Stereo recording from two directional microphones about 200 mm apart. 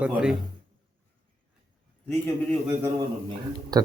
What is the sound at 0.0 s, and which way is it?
Speech, 5° right (ahead or behind).